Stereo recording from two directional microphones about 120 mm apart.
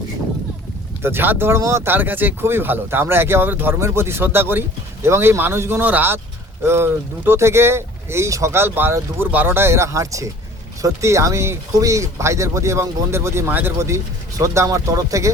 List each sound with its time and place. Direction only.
1.0 s speech: 15° right (ahead or behind)